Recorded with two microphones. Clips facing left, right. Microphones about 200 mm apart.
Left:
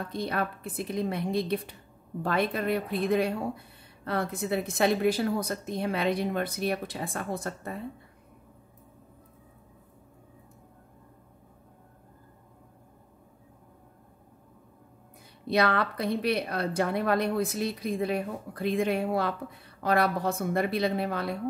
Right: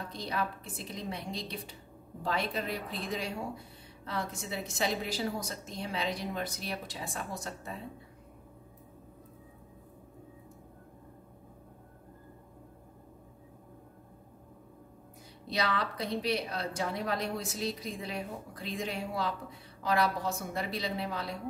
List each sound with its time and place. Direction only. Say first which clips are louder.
0.1 s speech: left 4 dB; 55° left (ahead or behind)
15.4 s speech: left 7 dB; 55° left (ahead or behind)